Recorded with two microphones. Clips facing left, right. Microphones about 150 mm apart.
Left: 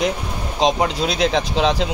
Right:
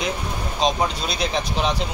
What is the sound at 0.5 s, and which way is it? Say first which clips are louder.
Speech: left 4 dB; 90° left.